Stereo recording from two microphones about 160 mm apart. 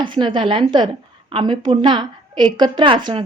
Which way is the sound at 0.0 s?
30° right (ahead or behind).